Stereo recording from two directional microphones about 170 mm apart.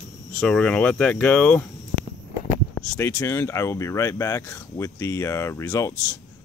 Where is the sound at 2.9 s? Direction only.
15° left (ahead or behind).